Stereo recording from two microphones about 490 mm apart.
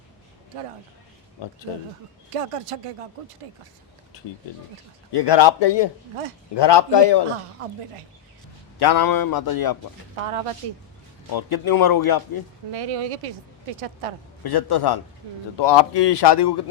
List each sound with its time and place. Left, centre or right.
1.4 s speech: left
2.3 s speech: right
4.1 s a sound: left
5.1 s speech: left
8.8 s a man's voice: left
10.2 s speech: right
11.3 s a man's voice: left
12.7 s speech: right
14.4 s a man's voice: left